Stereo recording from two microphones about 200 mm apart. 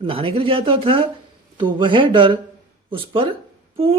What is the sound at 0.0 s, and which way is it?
Speech, 25° right (ahead or behind).